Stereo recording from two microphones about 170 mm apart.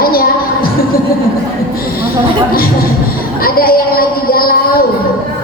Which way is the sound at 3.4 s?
60° left (ahead or behind).